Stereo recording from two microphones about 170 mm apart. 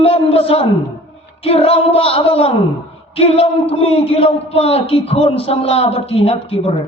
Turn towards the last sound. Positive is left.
turn(degrees=35)  # may be behind; listen again after turning